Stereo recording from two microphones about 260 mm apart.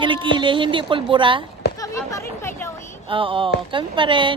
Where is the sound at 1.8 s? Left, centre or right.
Centre.